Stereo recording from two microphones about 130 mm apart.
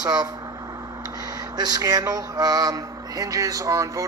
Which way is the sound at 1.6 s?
30° right (ahead or behind).